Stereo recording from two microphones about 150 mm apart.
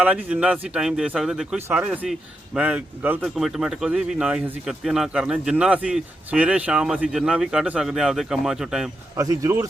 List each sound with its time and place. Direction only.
0.0 s speech: 5° right (ahead or behind)
9.1 s a man's voice: 25° right (ahead or behind)